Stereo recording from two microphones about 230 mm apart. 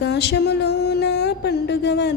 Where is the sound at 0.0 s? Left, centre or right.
Left.